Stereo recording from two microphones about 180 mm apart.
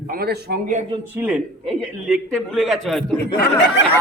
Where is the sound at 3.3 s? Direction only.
70° left (ahead or behind).